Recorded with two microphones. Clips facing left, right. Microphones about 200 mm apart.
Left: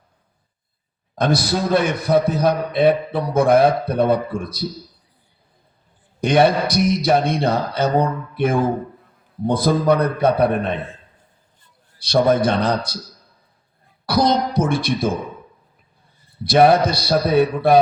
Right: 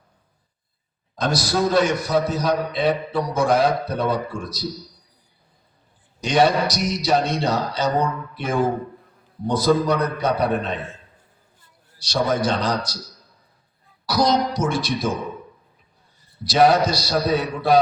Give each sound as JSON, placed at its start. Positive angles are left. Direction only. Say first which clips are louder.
{"t": 1.2, "sound": "a man's voice", "louder": "left 2 dB", "side_deg": 55}
{"t": 6.1, "sound": "a man's voice", "louder": "left 3 dB", "side_deg": 55}
{"t": 11.9, "sound": "a man's voice", "louder": "left 6 dB", "side_deg": 55}
{"t": 14.1, "sound": "a man's voice", "louder": "left 2 dB", "side_deg": 55}
{"t": 16.4, "sound": "a man's voice", "louder": "left 3 dB", "side_deg": 55}